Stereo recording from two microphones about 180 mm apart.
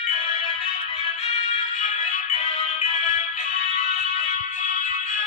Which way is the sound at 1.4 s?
40° left (ahead or behind).